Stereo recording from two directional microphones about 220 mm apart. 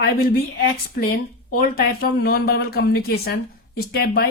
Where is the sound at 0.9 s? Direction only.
40° left (ahead or behind).